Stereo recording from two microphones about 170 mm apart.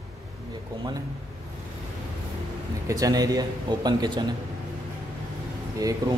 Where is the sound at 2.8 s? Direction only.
20° right (ahead or behind).